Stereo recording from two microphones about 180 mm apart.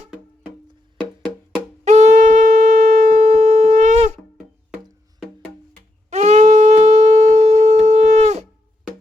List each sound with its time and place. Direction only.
1.8 s wind instrument: 40° right (ahead or behind)
6.1 s shofar: 40° right (ahead or behind)